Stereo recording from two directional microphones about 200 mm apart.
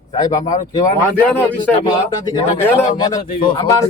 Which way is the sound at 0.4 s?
40° left (ahead or behind).